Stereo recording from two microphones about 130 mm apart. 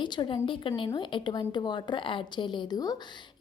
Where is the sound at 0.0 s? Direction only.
35° left (ahead or behind).